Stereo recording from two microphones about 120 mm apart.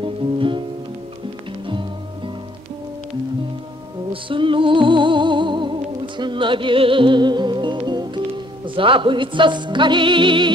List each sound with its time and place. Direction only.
0.0 s music: 45° right (ahead or behind)
1.7 s music: 45° right (ahead or behind)
4.1 s music: 45° right (ahead or behind)